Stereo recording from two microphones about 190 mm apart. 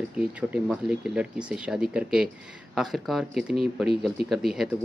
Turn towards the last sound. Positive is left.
turn(degrees=0)  # may be behind; listen again after turning